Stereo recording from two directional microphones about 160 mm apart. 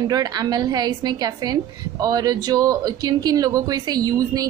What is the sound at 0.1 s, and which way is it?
A woman's voice, 25° right (ahead or behind).